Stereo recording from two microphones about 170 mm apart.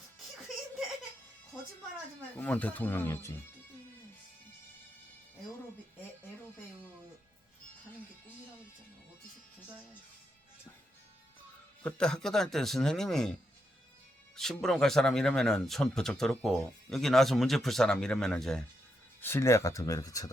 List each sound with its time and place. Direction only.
0.2 s music: centre (ahead or behind)
2.4 s speech: 10° left (ahead or behind)
11.8 s speech: 5° left (ahead or behind)
14.3 s speech: centre (ahead or behind)
19.2 s speech: 15° left (ahead or behind)